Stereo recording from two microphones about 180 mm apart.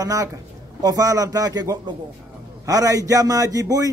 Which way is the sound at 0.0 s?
20° right (ahead or behind).